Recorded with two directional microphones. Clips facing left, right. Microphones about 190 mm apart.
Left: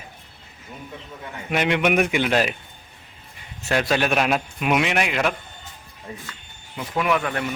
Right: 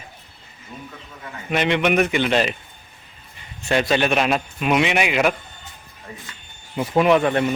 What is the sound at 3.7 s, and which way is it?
A man's voice, 5° left (ahead or behind).